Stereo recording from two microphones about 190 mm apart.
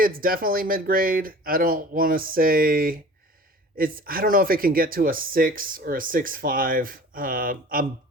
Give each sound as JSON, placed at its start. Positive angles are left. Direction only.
{"t": 0.0, "sound": "speech", "side_deg": -50}